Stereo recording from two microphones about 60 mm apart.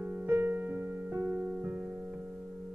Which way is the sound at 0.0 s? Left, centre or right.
Right.